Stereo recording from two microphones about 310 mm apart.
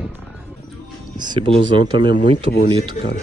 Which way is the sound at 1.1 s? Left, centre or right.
Centre.